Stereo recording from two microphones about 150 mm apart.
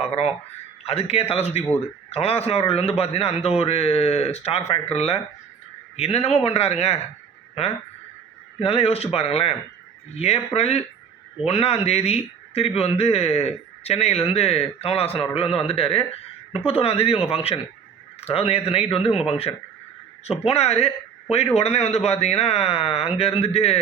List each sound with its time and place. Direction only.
0.9 s speech: 40° left (ahead or behind)
8.6 s speech: 40° left (ahead or behind)